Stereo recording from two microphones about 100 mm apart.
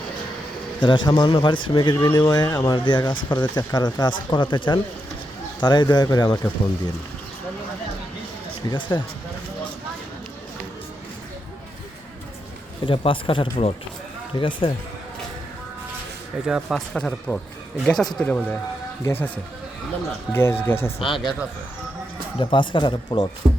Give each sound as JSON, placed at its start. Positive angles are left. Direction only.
{"t": 0.8, "sound": "speech", "side_deg": 50}
{"t": 8.6, "sound": "speech", "side_deg": 50}
{"t": 12.8, "sound": "speech", "side_deg": 60}
{"t": 14.3, "sound": "speech", "side_deg": 55}
{"t": 16.5, "sound": "speech", "side_deg": -5}
{"t": 18.3, "sound": "speech", "side_deg": 15}
{"t": 20.3, "sound": "speech", "side_deg": 25}
{"t": 21.0, "sound": "speech", "side_deg": 0}
{"t": 22.4, "sound": "speech", "side_deg": 60}